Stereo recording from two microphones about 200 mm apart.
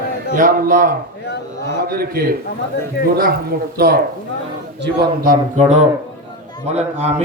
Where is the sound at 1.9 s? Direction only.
50° right (ahead or behind).